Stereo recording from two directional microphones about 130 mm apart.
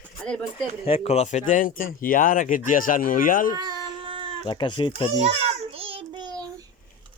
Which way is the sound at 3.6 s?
35° right (ahead or behind).